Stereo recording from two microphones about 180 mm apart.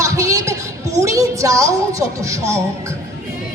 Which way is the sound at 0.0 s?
15° right (ahead or behind).